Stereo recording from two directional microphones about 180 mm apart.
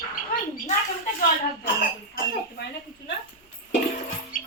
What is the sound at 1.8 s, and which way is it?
Cough, 60° left (ahead or behind).